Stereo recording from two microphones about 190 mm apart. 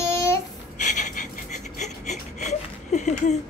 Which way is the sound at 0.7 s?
40° left (ahead or behind).